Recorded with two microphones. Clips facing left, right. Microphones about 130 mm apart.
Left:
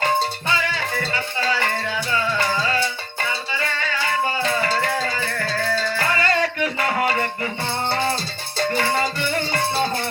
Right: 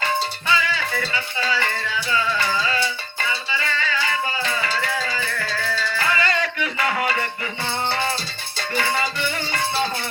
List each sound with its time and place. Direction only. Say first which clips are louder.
0.0 s music: left 3 dB; 45° left (ahead or behind)